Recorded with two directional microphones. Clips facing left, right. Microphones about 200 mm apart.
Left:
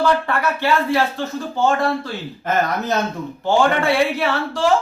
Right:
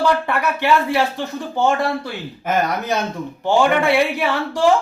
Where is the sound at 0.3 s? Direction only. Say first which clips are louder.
Right 1 dB; 15° right (ahead or behind).